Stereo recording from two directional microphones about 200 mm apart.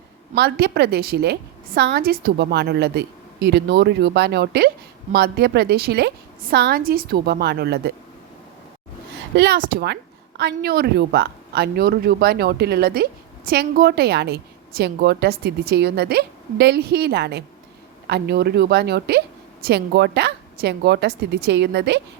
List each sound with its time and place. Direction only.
0.3 s a woman's voice: 50° right (ahead or behind)
9.3 s a woman's voice: 55° right (ahead or behind)